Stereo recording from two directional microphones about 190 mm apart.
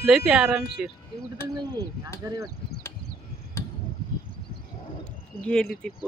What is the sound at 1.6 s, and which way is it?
Speech, 20° right (ahead or behind).